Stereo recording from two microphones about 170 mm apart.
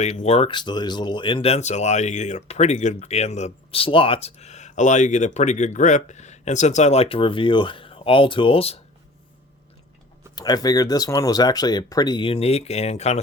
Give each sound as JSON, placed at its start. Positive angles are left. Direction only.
{"t": 0.0, "sound": "speech", "side_deg": 40}
{"t": 10.3, "sound": "speech", "side_deg": 25}